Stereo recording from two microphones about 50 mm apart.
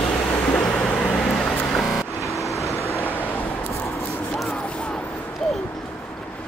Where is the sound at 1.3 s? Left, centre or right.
Centre.